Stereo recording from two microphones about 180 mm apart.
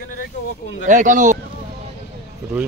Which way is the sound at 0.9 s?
45° right (ahead or behind).